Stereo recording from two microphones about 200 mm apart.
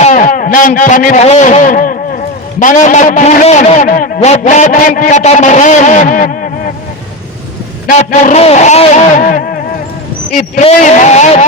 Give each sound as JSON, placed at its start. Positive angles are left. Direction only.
{"t": 0.0, "sound": "a man's voice", "side_deg": 40}
{"t": 7.9, "sound": "a man's voice", "side_deg": 40}